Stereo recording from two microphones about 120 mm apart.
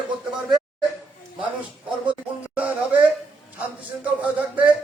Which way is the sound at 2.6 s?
10° right (ahead or behind).